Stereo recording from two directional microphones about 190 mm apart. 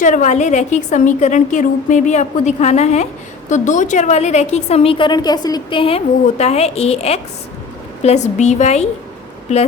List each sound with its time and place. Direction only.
0.0 s a woman's voice: 45° left (ahead or behind)